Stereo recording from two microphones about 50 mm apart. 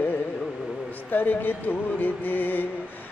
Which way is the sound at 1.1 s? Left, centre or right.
Left.